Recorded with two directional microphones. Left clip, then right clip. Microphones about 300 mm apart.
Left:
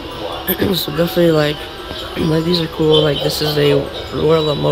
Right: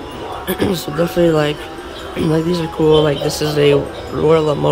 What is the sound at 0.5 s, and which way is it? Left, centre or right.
Speech, centre.